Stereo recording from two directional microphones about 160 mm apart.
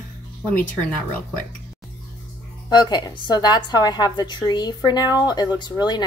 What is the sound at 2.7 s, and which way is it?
A woman's voice, 25° left (ahead or behind).